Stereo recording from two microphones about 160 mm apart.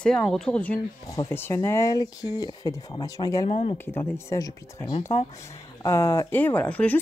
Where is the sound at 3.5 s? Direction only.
40° left (ahead or behind).